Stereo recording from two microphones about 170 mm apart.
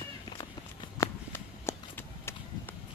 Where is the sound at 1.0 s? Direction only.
15° left (ahead or behind).